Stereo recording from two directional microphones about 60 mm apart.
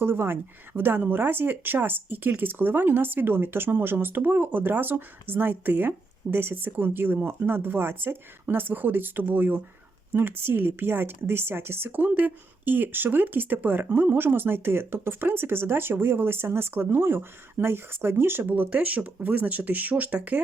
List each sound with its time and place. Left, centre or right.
0.0 s speech: right